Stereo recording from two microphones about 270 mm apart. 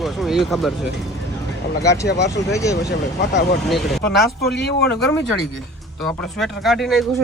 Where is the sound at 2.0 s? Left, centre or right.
Left.